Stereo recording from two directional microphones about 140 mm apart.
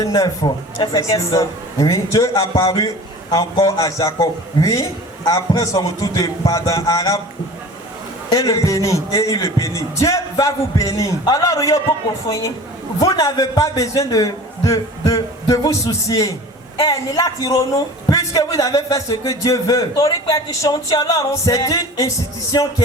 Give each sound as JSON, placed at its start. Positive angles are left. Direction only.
{"t": 0.0, "sound": "speech", "side_deg": 25}
{"t": 8.3, "sound": "speech", "side_deg": 25}
{"t": 13.0, "sound": "speech", "side_deg": 25}